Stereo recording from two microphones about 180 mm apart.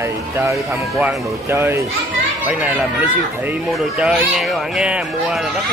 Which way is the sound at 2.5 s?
5° right (ahead or behind).